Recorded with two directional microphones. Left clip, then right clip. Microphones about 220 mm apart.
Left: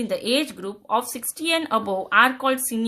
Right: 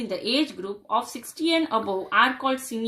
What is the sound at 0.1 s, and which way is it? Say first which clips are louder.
Speech: left 1 dB; 50° left (ahead or behind).